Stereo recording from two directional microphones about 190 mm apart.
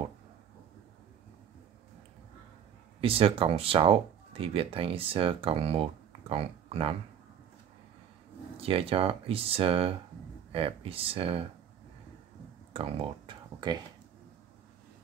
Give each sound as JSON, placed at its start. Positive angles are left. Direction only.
{"t": 3.0, "sound": "speech", "side_deg": -30}
{"t": 8.5, "sound": "speech", "side_deg": -30}
{"t": 12.7, "sound": "speech", "side_deg": -30}